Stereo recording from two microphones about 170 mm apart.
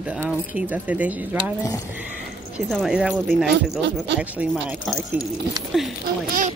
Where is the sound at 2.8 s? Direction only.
5° right (ahead or behind).